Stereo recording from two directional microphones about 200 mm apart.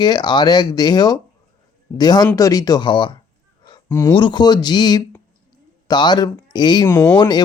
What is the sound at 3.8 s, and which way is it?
Speech, 10° left (ahead or behind).